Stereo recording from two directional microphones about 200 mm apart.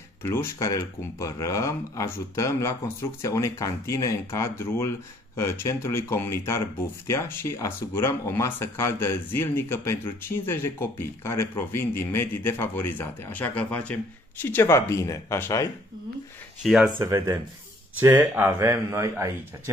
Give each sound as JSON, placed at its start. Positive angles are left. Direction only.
{"t": 0.2, "sound": "speech", "side_deg": 10}
{"t": 16.6, "sound": "speech", "side_deg": 0}
{"t": 17.0, "sound": "speech", "side_deg": -15}